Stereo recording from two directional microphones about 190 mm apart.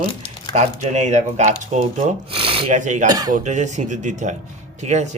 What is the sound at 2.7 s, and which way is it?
Speech, 40° right (ahead or behind).